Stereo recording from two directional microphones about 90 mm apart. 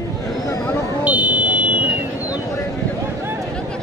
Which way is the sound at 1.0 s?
15° right (ahead or behind).